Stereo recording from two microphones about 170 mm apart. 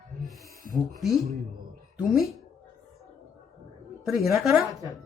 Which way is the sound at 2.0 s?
Centre (ahead or behind).